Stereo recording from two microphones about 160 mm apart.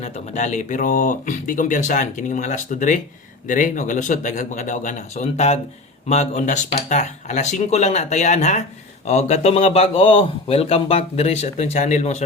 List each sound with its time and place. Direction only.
0.0 s speech: 50° left (ahead or behind)